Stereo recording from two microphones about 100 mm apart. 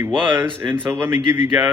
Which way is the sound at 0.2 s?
20° right (ahead or behind).